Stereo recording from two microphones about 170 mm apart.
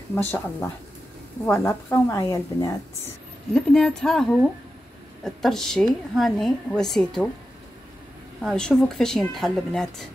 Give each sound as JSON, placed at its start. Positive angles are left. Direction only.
{"t": 0.1, "sound": "a woman's voice", "side_deg": 15}
{"t": 3.5, "sound": "a woman's voice", "side_deg": 5}
{"t": 8.4, "sound": "a woman's voice", "side_deg": 5}